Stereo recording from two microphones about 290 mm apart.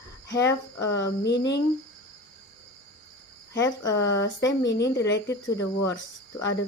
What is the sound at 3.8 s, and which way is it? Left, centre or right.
Speech, centre.